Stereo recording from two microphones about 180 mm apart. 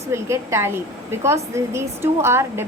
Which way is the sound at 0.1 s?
15° right (ahead or behind).